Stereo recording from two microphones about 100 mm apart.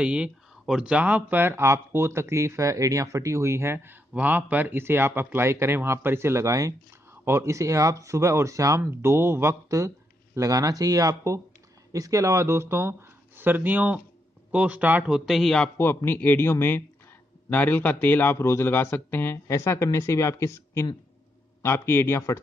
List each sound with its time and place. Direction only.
0.0 s speech: 10° right (ahead or behind)
15.0 s speech: 5° right (ahead or behind)
15.8 s a man's voice: 25° left (ahead or behind)